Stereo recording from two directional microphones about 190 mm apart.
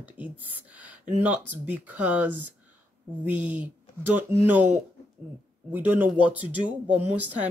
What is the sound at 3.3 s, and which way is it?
Speech, 10° right (ahead or behind).